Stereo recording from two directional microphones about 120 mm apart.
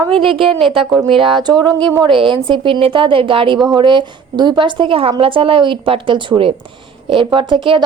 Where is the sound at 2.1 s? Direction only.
45° right (ahead or behind).